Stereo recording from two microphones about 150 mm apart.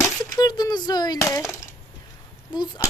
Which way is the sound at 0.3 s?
25° left (ahead or behind).